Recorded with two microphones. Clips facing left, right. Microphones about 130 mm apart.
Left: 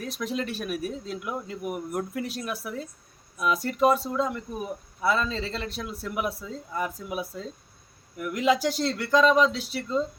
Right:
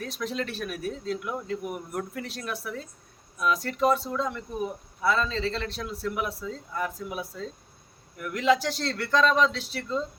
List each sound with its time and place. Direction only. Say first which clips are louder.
0.2 s speech: left 1 dB; 10° left (ahead or behind)